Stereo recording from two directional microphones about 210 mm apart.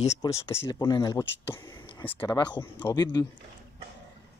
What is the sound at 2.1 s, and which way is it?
Speech, 15° left (ahead or behind).